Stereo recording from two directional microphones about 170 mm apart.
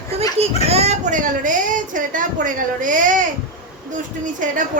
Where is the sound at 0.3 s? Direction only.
40° right (ahead or behind).